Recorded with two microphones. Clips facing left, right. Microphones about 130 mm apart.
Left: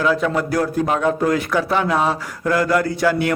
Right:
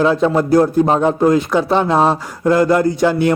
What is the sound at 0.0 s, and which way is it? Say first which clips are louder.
Speech: right 5 dB; 25° right (ahead or behind).